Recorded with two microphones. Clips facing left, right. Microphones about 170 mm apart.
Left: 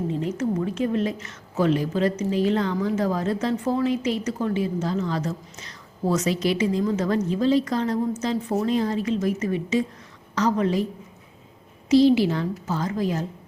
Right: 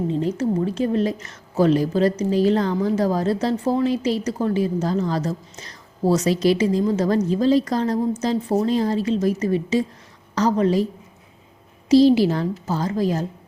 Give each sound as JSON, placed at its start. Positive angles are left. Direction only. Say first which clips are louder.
{"t": 0.1, "sound": "a woman's voice", "louder": "right 3 dB", "side_deg": -30}
{"t": 11.9, "sound": "a woman's voice", "louder": "right 3 dB", "side_deg": -35}